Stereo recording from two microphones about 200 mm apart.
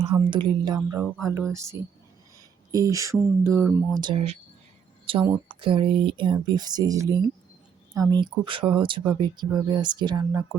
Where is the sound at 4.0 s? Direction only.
25° right (ahead or behind).